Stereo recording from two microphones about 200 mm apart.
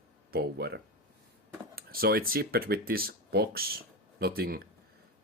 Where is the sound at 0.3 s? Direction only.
55° right (ahead or behind).